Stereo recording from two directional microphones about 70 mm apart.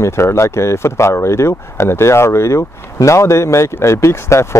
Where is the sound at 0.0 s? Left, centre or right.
Left.